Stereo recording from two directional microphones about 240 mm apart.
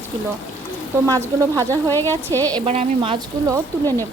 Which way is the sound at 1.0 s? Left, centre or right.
Centre.